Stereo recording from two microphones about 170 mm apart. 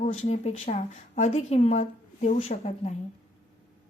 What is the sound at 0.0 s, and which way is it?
Speech, 40° left (ahead or behind).